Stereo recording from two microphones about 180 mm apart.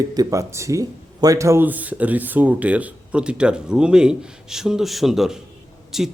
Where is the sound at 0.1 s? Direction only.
20° right (ahead or behind).